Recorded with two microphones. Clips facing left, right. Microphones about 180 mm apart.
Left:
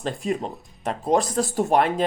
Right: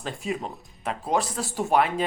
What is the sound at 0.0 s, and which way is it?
Speech, 35° left (ahead or behind).